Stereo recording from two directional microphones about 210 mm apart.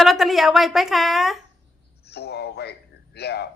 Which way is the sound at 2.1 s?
50° left (ahead or behind).